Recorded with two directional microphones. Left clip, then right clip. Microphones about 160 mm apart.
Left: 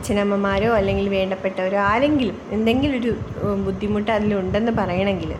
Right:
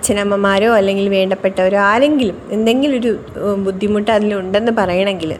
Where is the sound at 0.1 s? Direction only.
50° right (ahead or behind).